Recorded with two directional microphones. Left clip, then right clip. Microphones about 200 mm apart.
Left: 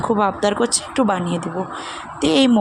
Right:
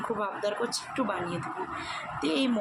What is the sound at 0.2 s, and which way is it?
A woman's voice, 40° left (ahead or behind).